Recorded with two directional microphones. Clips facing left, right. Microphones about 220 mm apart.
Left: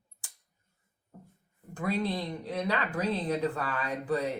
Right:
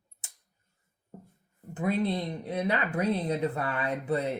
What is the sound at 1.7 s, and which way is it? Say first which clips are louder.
Speech: right 3 dB; 20° right (ahead or behind).